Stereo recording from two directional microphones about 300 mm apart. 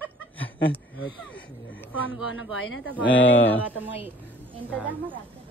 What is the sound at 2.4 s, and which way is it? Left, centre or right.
Speech, left.